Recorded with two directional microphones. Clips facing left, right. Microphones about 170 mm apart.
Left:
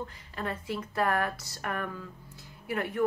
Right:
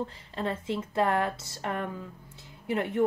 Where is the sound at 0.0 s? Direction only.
25° right (ahead or behind).